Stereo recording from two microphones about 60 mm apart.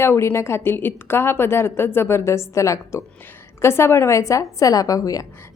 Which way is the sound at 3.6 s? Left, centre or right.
Left.